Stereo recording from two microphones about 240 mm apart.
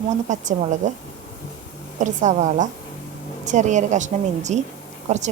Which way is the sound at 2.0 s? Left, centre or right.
Right.